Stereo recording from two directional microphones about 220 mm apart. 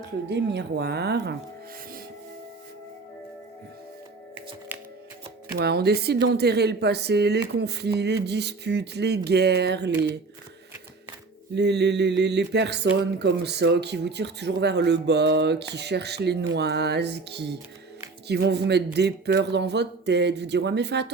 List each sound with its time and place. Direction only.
0.3 s speech: 50° right (ahead or behind)
4.7 s shuffling cards: 10° right (ahead or behind)
5.5 s speech: 45° right (ahead or behind)
11.5 s speech: 50° right (ahead or behind)